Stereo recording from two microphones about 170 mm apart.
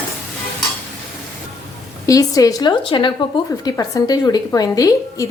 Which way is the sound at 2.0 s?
20° left (ahead or behind).